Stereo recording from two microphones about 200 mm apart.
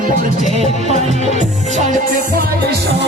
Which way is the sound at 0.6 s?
30° right (ahead or behind).